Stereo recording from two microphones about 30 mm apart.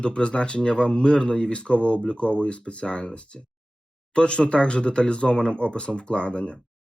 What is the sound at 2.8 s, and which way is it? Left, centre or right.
Speech, left.